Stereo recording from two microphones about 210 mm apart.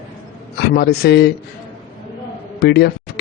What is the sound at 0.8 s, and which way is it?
Speech, 50° left (ahead or behind).